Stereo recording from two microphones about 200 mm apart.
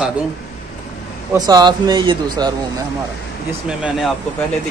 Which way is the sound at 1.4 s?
20° right (ahead or behind).